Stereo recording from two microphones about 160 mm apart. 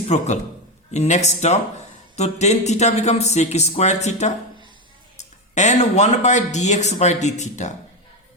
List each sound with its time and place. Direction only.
0.1 s speech: 45° left (ahead or behind)